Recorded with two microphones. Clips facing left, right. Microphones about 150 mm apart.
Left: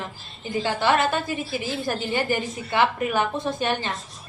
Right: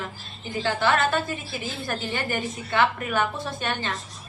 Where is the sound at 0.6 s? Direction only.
20° left (ahead or behind).